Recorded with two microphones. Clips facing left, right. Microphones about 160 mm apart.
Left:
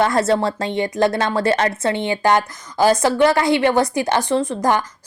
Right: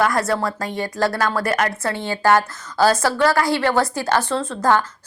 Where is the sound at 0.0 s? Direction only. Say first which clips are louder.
Left 3 dB; 25° left (ahead or behind).